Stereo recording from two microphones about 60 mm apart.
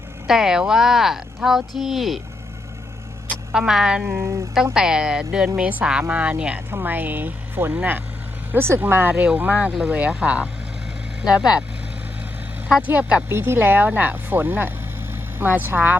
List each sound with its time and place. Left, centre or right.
0.3 s speech: centre
3.5 s a woman's voice: centre
4.0 s speech: right
4.6 s a woman's voice: centre
6.8 s speech: right
8.5 s speech: right
9.1 s a woman's voice: centre
12.9 s speech: right
13.3 s speech: right